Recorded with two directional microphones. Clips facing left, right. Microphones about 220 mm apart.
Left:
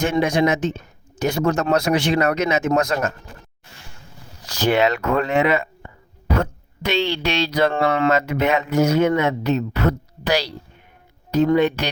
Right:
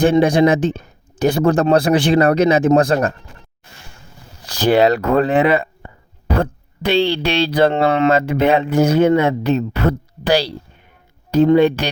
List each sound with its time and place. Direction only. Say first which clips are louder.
0.0 s speech: right 6 dB; 35° right (ahead or behind)
4.4 s speech: right 5 dB; 35° right (ahead or behind)